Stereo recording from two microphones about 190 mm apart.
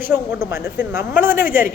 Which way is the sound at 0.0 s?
10° right (ahead or behind).